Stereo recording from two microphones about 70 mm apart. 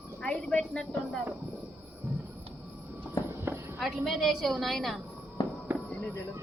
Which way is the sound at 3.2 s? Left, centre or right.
Left.